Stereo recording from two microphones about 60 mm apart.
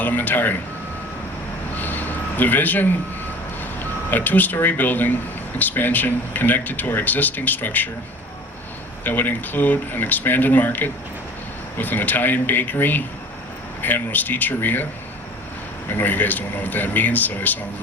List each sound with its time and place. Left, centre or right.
0.0 s speech: left
1.7 s a sound: left
3.6 s speech: left
9.0 s speech: left
15.9 s a man's voice: left